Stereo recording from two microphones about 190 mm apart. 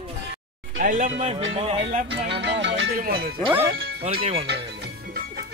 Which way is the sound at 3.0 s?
50° right (ahead or behind).